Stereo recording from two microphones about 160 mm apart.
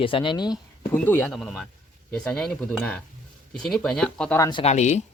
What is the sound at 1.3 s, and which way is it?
Speech, centre (ahead or behind).